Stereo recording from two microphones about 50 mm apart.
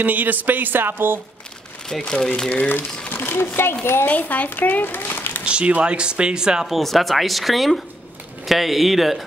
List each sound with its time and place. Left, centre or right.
0.0 s speech: right
1.9 s speech: centre
3.1 s a woman's voice: left
4.1 s a child's voice: left
5.4 s speech: right
6.7 s speech: centre